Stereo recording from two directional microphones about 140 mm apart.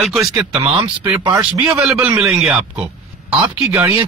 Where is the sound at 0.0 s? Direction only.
Centre (ahead or behind).